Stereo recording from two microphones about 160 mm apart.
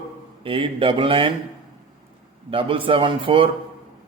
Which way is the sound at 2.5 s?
35° right (ahead or behind).